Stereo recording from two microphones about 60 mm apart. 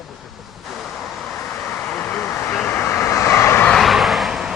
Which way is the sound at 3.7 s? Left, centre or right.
Centre.